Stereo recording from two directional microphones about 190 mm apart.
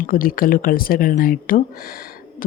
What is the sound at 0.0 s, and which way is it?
Speech, 50° left (ahead or behind).